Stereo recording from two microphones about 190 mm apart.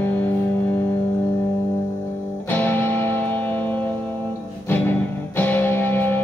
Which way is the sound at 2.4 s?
10° left (ahead or behind).